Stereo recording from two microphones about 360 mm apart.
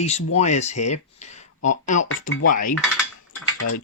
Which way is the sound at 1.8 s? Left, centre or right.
Left.